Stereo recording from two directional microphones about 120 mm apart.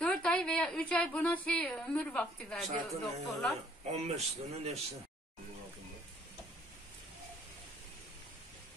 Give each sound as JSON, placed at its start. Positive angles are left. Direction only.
{"t": 0.0, "sound": "a woman's voice", "side_deg": 10}
{"t": 3.9, "sound": "a man's voice", "side_deg": -60}